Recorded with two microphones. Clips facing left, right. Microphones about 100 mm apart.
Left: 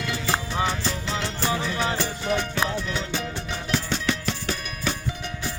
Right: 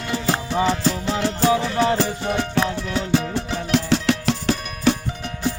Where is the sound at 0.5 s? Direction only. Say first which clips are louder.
Right 6 dB; 90° right.